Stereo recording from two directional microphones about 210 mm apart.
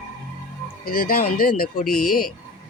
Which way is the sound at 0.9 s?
45° left (ahead or behind).